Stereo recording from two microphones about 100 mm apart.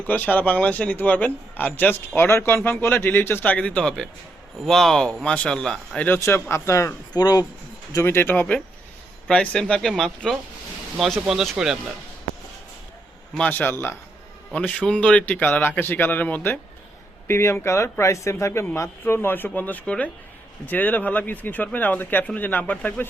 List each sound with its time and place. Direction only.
0.0 s a man's voice: 15° left (ahead or behind)
6.1 s speech: 25° left (ahead or behind)
7.1 s speech: 40° left (ahead or behind)
7.9 s a man's voice: 25° left (ahead or behind); by 11.8 s 5° right (ahead or behind)
13.3 s speech: 15° left (ahead or behind)
14.5 s a man's voice: 10° left (ahead or behind)